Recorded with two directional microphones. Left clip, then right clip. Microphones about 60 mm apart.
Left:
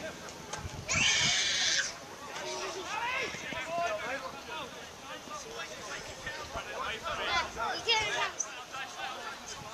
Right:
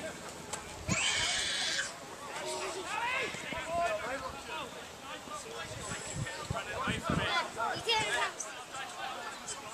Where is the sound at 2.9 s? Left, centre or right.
Centre.